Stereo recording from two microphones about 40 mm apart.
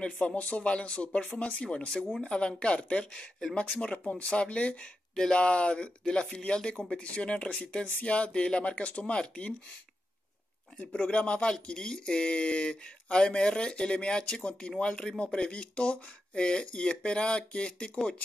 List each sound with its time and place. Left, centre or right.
0.4 s speech: left
5.1 s speech: centre
5.4 s speech: left
10.8 s speech: left